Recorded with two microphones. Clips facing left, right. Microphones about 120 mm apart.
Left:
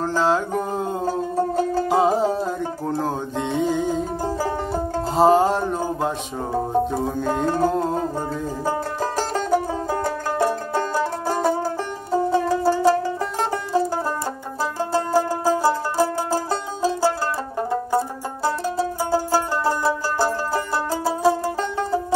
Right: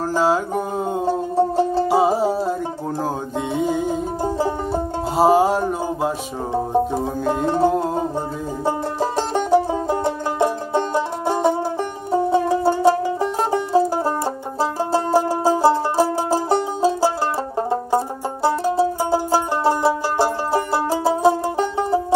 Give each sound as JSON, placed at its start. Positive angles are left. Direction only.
{"t": 0.0, "sound": "music", "side_deg": -10}
{"t": 1.0, "sound": "music", "side_deg": -25}
{"t": 1.9, "sound": "music", "side_deg": -5}
{"t": 4.2, "sound": "music", "side_deg": -25}
{"t": 5.1, "sound": "a sound", "side_deg": -10}
{"t": 6.5, "sound": "music", "side_deg": -20}
{"t": 7.0, "sound": "music", "side_deg": -5}
{"t": 8.6, "sound": "music", "side_deg": -25}
{"t": 17.6, "sound": "banjo", "side_deg": -25}
{"t": 20.2, "sound": "music", "side_deg": -25}